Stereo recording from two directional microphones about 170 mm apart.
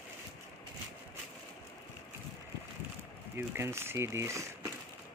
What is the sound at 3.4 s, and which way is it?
Speech, 15° right (ahead or behind).